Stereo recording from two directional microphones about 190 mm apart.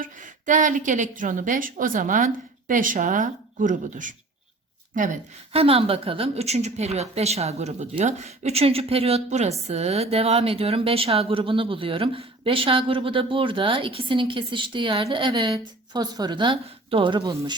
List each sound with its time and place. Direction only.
0.0 s a woman's voice: 40° right (ahead or behind)
5.5 s a woman's voice: 30° right (ahead or behind)